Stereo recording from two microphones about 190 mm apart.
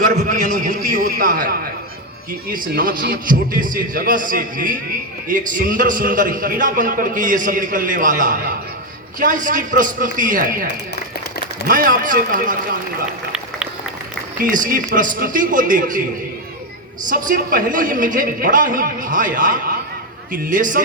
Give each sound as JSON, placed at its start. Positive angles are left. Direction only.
{"t": 0.0, "sound": "a man's voice", "side_deg": -45}
{"t": 11.7, "sound": "a man's voice", "side_deg": -45}
{"t": 14.3, "sound": "a man's voice", "side_deg": -45}
{"t": 17.1, "sound": "a man's voice", "side_deg": -45}